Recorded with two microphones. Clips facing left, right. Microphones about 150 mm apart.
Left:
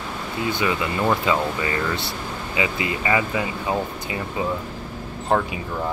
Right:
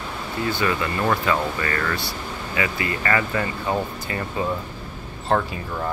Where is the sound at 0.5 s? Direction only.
15° left (ahead or behind).